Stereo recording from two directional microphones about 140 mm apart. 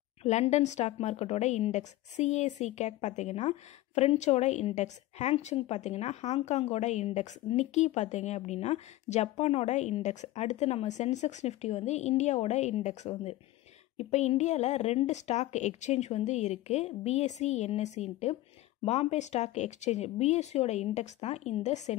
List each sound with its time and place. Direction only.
0.2 s a woman's voice: 55° left (ahead or behind)